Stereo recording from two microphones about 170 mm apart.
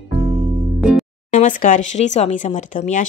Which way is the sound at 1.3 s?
50° left (ahead or behind).